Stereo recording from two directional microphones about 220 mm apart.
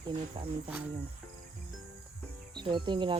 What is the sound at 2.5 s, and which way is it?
Speech, 20° right (ahead or behind).